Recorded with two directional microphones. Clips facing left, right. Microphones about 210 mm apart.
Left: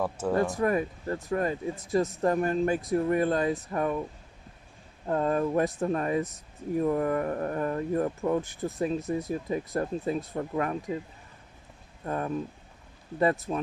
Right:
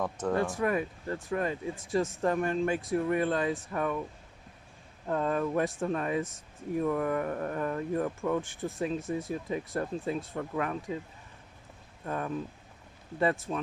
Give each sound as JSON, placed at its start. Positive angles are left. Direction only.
{"t": 0.0, "sound": "speech", "side_deg": 10}
{"t": 0.5, "sound": "speech", "side_deg": 40}
{"t": 5.0, "sound": "speech", "side_deg": 40}
{"t": 12.0, "sound": "speech", "side_deg": 40}